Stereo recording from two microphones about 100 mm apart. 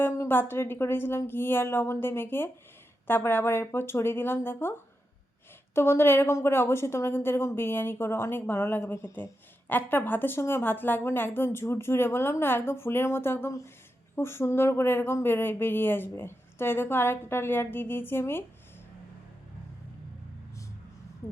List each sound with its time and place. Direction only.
0.2 s a woman's voice: 20° left (ahead or behind)
5.7 s a woman's voice: 25° left (ahead or behind)